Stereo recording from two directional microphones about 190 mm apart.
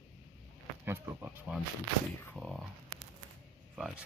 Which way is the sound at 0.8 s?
15° right (ahead or behind).